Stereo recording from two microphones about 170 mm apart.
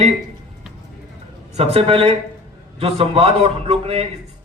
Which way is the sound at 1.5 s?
35° right (ahead or behind).